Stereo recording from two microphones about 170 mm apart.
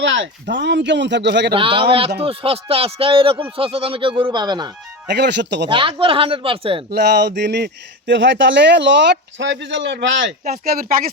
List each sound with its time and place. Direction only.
0.0 s speech: 90° right
1.5 s speech: 30° right (ahead or behind)
5.0 s speech: 85° right
5.6 s speech: 30° right (ahead or behind)
6.9 s speech: 80° right; by 11.1 s 60° right (ahead or behind)